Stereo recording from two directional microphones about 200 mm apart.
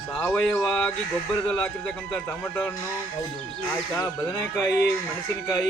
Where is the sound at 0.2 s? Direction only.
5° left (ahead or behind).